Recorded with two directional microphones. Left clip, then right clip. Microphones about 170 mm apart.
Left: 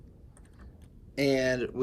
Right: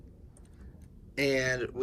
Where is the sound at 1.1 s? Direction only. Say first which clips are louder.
Left 2 dB; 5° left (ahead or behind).